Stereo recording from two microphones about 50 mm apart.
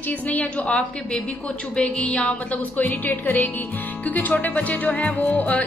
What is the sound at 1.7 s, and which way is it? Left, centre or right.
Music, left.